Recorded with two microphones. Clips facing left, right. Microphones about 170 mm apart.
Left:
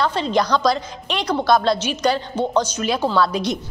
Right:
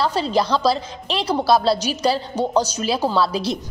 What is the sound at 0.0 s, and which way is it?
A woman's voice, 35° right (ahead or behind).